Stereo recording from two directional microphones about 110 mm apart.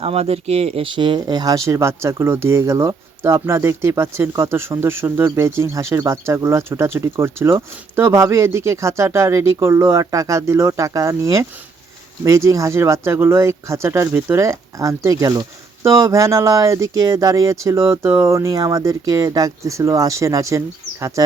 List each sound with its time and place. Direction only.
0.0 s speech: 65° right (ahead or behind); by 21.3 s 30° right (ahead or behind)